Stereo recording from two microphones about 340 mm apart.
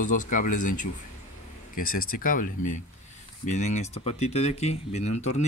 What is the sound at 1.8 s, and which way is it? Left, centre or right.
Speech, left.